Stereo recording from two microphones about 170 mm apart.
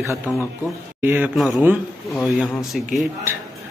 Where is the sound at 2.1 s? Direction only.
Centre (ahead or behind).